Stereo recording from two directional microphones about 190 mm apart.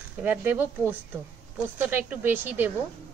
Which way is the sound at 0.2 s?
10° right (ahead or behind).